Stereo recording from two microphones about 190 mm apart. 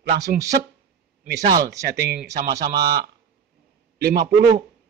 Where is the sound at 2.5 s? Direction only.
20° right (ahead or behind).